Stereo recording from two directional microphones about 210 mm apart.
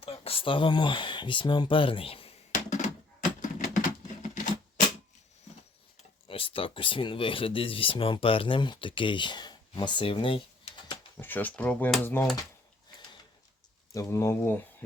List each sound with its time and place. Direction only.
0.0 s a sound: 25° left (ahead or behind)
6.2 s speech: 25° left (ahead or behind)
11.2 s speech: 10° left (ahead or behind)
13.9 s speech: 15° left (ahead or behind)